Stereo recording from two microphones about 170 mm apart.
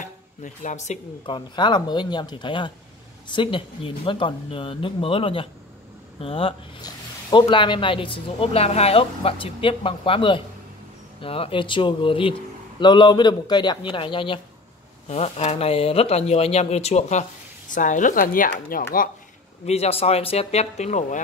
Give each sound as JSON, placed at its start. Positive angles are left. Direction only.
{"t": 0.0, "sound": "a sound", "side_deg": 45}
{"t": 1.2, "sound": "a man's voice", "side_deg": 25}
{"t": 15.0, "sound": "speech", "side_deg": 40}
{"t": 19.6, "sound": "speech", "side_deg": 40}